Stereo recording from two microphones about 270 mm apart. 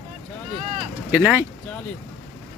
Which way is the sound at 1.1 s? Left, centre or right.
Centre.